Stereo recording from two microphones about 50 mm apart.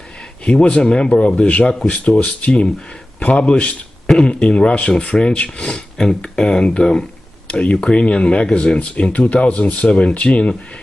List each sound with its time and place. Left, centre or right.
0.5 s speech: left